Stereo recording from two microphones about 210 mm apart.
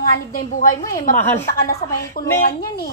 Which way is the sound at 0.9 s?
40° left (ahead or behind).